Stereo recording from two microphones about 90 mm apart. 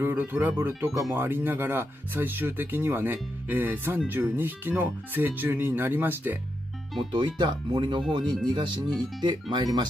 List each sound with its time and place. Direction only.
0.0 s speech: 25° right (ahead or behind)
7.0 s speech: 60° right (ahead or behind)